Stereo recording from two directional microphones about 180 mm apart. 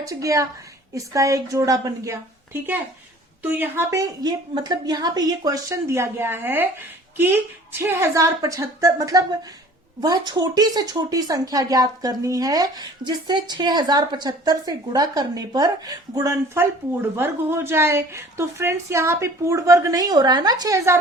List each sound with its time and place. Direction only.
0.0 s a woman's voice: 20° right (ahead or behind)